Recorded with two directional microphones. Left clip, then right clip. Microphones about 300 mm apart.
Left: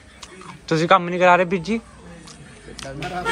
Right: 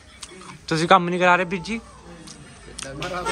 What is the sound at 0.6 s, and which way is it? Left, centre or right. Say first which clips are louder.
A man's voice: even; centre.